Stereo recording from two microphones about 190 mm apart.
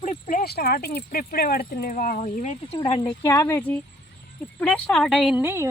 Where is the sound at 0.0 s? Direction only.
45° left (ahead or behind).